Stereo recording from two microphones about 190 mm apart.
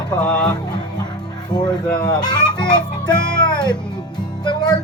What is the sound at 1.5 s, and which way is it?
A child's voice, 20° left (ahead or behind).